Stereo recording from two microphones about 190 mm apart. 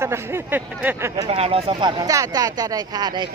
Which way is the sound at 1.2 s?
35° right (ahead or behind).